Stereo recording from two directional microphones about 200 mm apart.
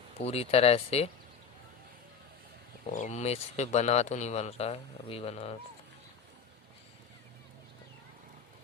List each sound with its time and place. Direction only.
0.2 s speech: 30° left (ahead or behind)
2.8 s speech: 35° left (ahead or behind)